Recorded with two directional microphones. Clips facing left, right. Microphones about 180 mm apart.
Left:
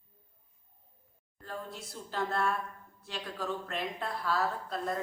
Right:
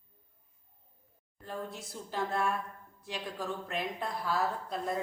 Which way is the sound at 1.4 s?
15° right (ahead or behind).